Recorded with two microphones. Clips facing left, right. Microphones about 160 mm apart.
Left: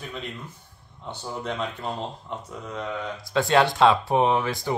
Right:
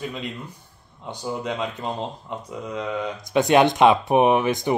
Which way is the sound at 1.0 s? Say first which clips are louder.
Right 4 dB; 15° right (ahead or behind).